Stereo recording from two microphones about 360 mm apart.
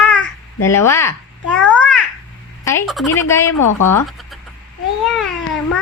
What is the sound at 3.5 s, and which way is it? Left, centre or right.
Speech, left.